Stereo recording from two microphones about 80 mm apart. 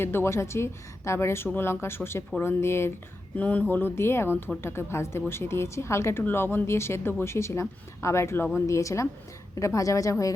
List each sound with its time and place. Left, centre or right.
0.0 s speech: left
3.3 s speech: centre; by 10.3 s left